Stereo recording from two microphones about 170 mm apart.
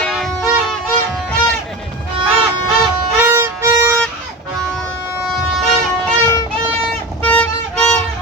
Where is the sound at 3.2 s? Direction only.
15° right (ahead or behind).